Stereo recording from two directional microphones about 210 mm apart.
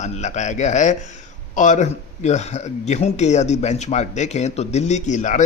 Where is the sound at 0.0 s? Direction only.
35° left (ahead or behind).